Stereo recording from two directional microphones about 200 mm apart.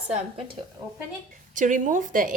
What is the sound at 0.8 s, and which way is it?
Speech, 15° right (ahead or behind).